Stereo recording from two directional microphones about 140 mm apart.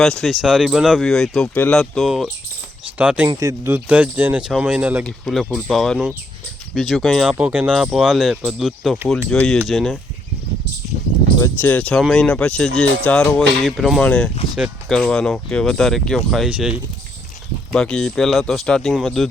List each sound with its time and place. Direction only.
0.0 s speech: 5° left (ahead or behind)
3.2 s speech: 20° right (ahead or behind)
5.0 s speech: centre (ahead or behind)
11.3 s speech: 25° left (ahead or behind)
11.7 s speech: 10° left (ahead or behind)
17.7 s speech: 5° left (ahead or behind)